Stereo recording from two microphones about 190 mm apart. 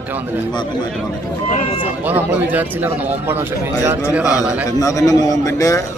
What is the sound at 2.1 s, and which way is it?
A man's voice, 10° right (ahead or behind).